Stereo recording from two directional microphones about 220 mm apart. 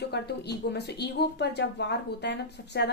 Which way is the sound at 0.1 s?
50° left (ahead or behind).